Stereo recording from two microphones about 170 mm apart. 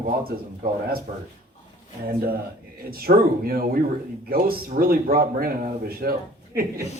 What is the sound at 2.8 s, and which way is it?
A man's voice, 60° right (ahead or behind).